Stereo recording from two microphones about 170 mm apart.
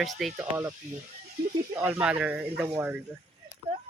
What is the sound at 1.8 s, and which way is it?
Speech, 10° right (ahead or behind).